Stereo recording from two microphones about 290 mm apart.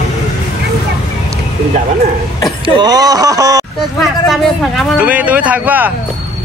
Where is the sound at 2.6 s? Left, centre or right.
Centre.